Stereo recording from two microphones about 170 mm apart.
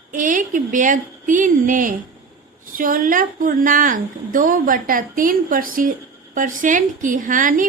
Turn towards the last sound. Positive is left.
turn(degrees=-50)  # may be behind; listen again after turning